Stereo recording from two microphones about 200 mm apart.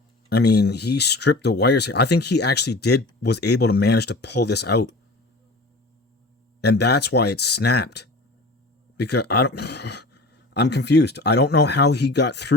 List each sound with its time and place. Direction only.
0.3 s speech: 55° left (ahead or behind)
6.6 s speech: 55° left (ahead or behind)